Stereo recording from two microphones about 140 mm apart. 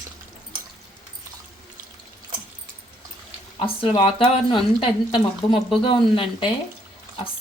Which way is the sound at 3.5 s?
40° left (ahead or behind).